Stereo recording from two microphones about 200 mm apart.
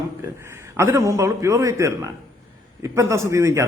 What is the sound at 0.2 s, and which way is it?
A man's voice, 15° right (ahead or behind).